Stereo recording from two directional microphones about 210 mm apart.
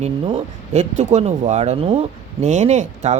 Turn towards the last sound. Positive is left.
turn(degrees=-35)  # may be behind; listen again after turning